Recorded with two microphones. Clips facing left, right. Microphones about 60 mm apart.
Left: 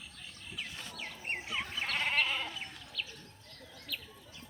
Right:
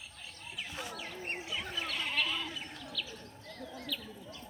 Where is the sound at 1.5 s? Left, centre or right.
Left.